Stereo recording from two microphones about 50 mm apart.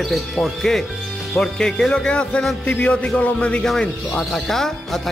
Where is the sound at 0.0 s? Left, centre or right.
Centre; by 3.6 s left.